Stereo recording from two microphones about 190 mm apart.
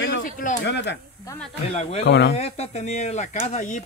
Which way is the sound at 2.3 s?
35° left (ahead or behind).